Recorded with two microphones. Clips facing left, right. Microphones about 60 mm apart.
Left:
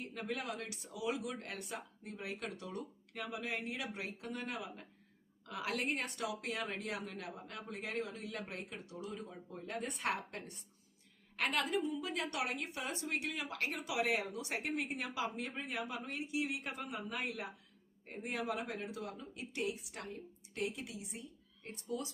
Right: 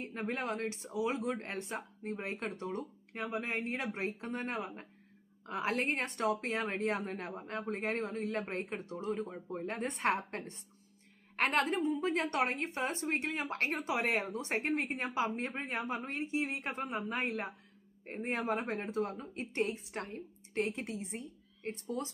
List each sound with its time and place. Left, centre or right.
0.0 s a woman's voice: right